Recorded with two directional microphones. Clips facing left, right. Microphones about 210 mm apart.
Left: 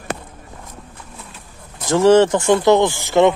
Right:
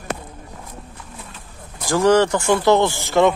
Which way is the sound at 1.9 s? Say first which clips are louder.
Left 3 dB; 25° left (ahead or behind).